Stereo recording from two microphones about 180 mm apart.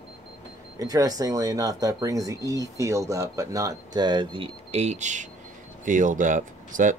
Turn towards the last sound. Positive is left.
turn(degrees=-45)  # may be behind; listen again after turning